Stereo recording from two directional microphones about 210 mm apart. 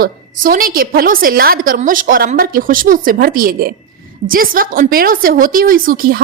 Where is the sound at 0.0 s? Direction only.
40° right (ahead or behind).